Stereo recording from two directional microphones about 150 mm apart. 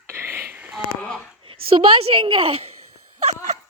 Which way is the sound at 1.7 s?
40° right (ahead or behind).